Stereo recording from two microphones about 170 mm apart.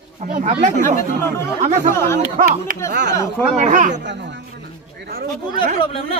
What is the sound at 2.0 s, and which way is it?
Speech, 15° left (ahead or behind).